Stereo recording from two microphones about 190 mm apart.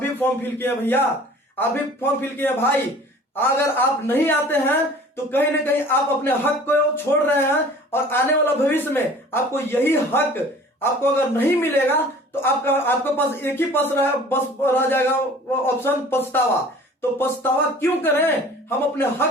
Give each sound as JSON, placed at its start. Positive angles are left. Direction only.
{"t": 0.0, "sound": "a man's voice", "side_deg": 10}